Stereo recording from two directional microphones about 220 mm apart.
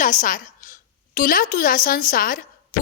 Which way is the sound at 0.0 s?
35° left (ahead or behind).